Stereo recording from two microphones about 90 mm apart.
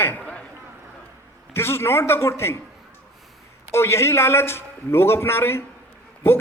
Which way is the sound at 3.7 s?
30° left (ahead or behind).